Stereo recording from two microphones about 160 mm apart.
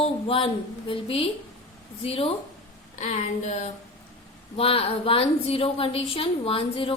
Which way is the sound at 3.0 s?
45° left (ahead or behind).